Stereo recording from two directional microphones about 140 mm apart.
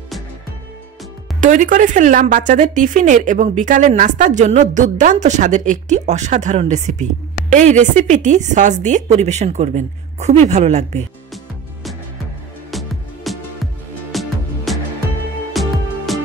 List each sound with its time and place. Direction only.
1.4 s a woman's voice: 70° right (ahead or behind)
12.7 s music: centre (ahead or behind)